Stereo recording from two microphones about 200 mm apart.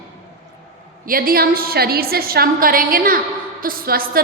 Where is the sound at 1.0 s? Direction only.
45° right (ahead or behind).